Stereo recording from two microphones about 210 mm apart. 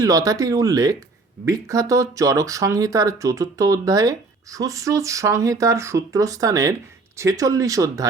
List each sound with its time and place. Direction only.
0.0 s speech: 15° right (ahead or behind)